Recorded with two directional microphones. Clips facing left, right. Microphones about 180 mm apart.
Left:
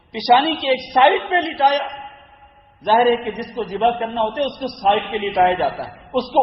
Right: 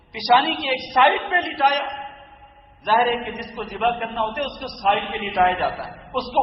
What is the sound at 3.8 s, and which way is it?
A woman's voice, 30° left (ahead or behind).